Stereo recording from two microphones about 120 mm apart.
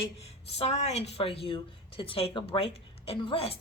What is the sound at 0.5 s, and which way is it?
A woman's voice, 65° left (ahead or behind).